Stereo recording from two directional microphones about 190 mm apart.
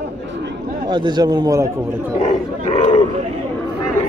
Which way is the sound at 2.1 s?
35° left (ahead or behind).